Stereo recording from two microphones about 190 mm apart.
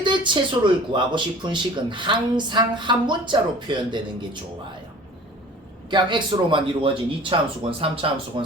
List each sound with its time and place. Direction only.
0.0 s speech: 25° right (ahead or behind)
5.9 s speech: 25° right (ahead or behind)